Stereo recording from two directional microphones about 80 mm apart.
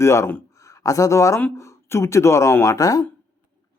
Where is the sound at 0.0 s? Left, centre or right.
Left.